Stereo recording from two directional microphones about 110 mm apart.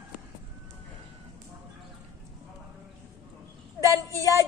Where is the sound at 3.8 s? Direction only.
25° right (ahead or behind).